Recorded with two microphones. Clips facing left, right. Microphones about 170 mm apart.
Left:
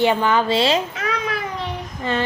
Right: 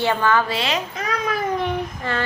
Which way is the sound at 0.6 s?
30° left (ahead or behind).